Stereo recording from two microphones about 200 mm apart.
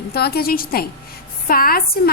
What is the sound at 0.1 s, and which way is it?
A woman's voice, 50° left (ahead or behind).